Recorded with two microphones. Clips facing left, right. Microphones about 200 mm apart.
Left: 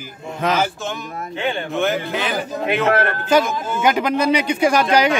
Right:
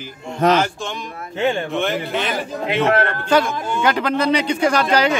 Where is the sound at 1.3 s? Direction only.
45° right (ahead or behind).